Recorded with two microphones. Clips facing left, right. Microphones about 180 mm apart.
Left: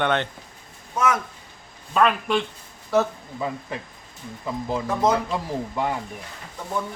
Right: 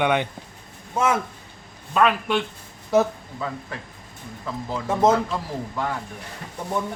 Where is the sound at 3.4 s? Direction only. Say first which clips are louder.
Left 3 dB; 15° left (ahead or behind).